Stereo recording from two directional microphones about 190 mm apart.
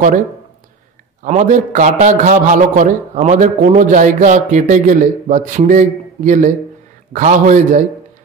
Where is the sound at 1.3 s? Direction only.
40° right (ahead or behind).